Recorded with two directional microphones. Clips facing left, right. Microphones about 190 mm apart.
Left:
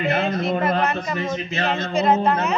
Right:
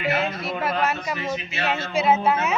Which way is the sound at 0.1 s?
50° left (ahead or behind).